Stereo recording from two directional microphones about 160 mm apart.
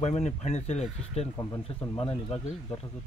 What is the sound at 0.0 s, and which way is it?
Speech, 40° left (ahead or behind).